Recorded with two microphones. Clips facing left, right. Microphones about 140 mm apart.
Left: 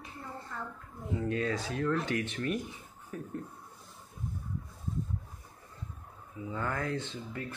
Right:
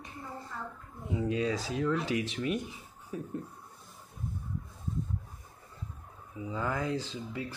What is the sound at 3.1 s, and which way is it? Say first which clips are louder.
Speech: right 2 dB; 20° right (ahead or behind).